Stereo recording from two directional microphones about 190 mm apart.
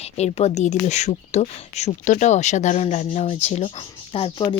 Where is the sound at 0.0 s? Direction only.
35° left (ahead or behind).